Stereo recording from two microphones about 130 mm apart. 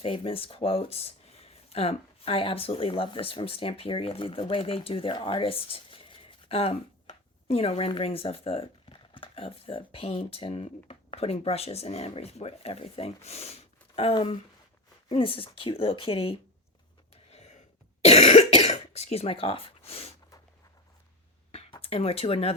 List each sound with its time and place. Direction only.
0.0 s speech: 45° left (ahead or behind)
18.0 s cough: 55° left (ahead or behind)
21.5 s a sound: 50° left (ahead or behind)